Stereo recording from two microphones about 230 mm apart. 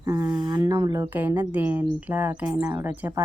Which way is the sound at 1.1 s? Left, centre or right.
Centre.